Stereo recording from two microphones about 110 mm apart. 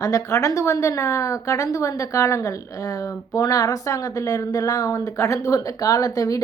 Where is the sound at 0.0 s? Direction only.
30° left (ahead or behind).